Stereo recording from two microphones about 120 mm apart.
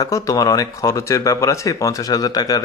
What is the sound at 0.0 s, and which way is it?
Speech, 30° left (ahead or behind).